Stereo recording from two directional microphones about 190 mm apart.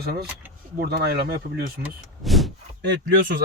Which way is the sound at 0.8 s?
55° right (ahead or behind).